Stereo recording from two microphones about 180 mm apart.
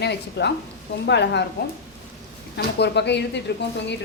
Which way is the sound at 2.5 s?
70° left (ahead or behind).